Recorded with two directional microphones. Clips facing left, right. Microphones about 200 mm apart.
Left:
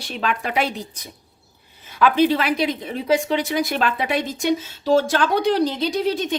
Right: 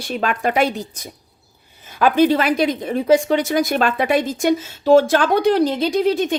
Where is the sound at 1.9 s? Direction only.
45° right (ahead or behind).